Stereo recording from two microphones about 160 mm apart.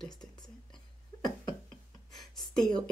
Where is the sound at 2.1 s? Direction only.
5° left (ahead or behind).